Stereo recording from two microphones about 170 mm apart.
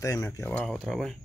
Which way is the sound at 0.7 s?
Centre (ahead or behind).